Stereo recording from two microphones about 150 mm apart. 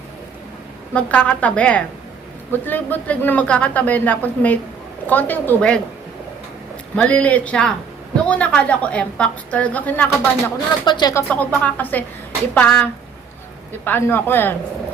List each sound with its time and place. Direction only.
0.9 s a woman's voice: 10° left (ahead or behind)
6.9 s a woman's voice: 10° left (ahead or behind)
10.8 s speech: 30° left (ahead or behind)
11.1 s a woman's voice: 15° left (ahead or behind)